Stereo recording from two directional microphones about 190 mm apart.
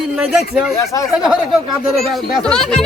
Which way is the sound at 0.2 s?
5° right (ahead or behind).